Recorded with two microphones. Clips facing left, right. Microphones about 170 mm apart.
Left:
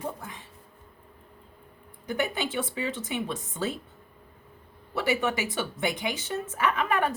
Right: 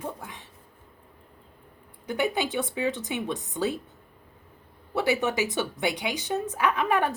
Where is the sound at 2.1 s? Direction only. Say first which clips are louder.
Right 2 dB; 15° right (ahead or behind).